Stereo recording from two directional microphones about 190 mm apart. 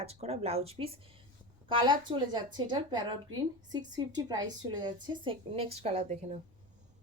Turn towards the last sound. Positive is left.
turn(degrees=-35)  # may be behind; listen again after turning